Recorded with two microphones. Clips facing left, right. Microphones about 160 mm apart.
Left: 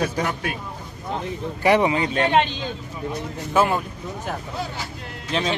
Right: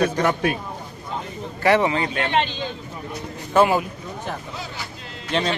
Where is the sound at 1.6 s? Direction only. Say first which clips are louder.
Even; 15° left (ahead or behind).